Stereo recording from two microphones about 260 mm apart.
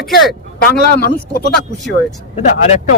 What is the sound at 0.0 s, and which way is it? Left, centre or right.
Speech, centre.